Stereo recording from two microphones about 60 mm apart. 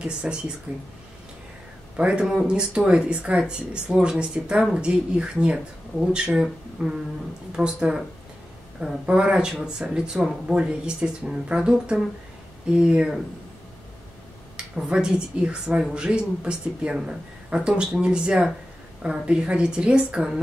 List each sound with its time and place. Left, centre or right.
0.0 s speech: centre
0.7 s speech: right
2.0 s speech: centre
14.8 s speech: centre